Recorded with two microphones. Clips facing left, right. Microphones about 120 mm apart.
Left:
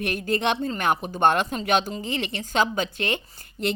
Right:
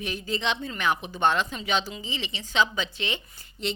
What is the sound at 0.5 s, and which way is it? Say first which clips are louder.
Speech: left 4 dB; 45° left (ahead or behind).